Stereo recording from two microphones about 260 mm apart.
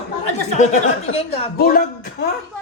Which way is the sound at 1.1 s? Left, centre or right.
Left.